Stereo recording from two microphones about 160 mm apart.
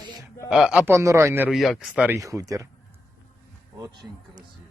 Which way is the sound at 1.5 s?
Centre (ahead or behind).